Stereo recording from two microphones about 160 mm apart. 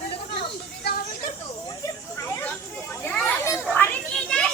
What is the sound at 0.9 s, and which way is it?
Speech, 65° left (ahead or behind).